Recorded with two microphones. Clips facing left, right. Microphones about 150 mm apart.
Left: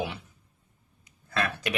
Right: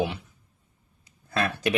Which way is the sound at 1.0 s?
30° right (ahead or behind).